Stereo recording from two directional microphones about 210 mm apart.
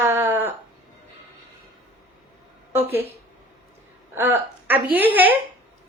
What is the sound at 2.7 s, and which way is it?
Speech, 10° right (ahead or behind).